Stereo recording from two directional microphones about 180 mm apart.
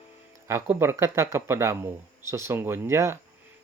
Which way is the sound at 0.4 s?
15° right (ahead or behind).